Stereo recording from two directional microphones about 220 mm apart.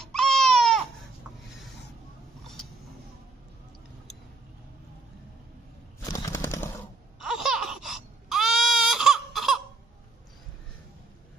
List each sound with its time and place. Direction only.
0.0 s baby cry: centre (ahead or behind)
6.0 s a sound: 15° left (ahead or behind)
7.2 s baby cry: centre (ahead or behind)